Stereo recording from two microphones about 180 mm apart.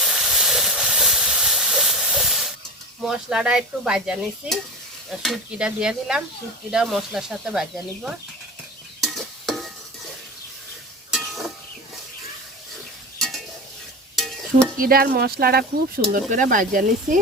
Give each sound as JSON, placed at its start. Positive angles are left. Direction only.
{"t": 0.0, "sound": "steam", "side_deg": 0}
{"t": 3.0, "sound": "speech", "side_deg": -5}
{"t": 9.0, "sound": "stir", "side_deg": 0}
{"t": 11.1, "sound": "a sound", "side_deg": 0}
{"t": 13.1, "sound": "stir", "side_deg": 0}
{"t": 14.8, "sound": "speech", "side_deg": -55}
{"t": 16.1, "sound": "speech", "side_deg": -45}